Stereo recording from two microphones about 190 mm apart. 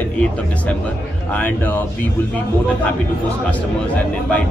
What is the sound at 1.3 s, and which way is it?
Speech, 10° left (ahead or behind).